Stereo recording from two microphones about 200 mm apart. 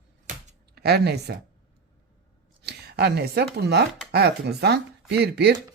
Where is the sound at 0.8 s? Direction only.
55° right (ahead or behind).